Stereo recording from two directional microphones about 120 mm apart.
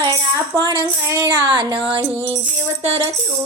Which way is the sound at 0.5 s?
40° right (ahead or behind).